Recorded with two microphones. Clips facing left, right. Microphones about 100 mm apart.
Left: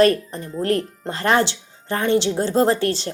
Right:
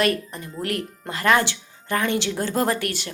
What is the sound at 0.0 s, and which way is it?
A woman's voice, 35° left (ahead or behind).